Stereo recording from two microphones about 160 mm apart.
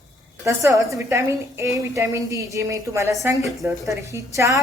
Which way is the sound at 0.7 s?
Centre (ahead or behind).